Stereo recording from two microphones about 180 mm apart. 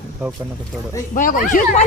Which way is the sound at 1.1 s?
50° left (ahead or behind).